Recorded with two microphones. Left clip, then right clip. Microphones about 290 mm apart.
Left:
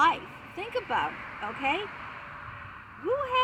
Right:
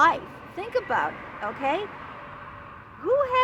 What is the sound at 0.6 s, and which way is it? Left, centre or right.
Speech, centre.